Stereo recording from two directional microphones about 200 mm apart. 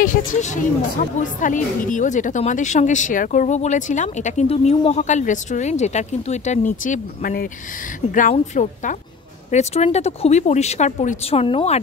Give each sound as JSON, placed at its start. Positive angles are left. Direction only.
{"t": 0.0, "sound": "speech", "side_deg": 40}